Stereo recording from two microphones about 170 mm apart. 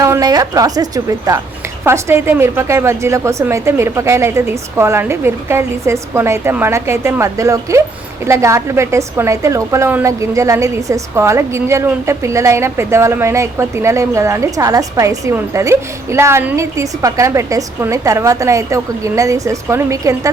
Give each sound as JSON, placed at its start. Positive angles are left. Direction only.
{"t": 0.0, "sound": "a woman's voice", "side_deg": -20}